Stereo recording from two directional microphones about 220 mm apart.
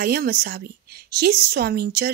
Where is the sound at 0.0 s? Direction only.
45° right (ahead or behind).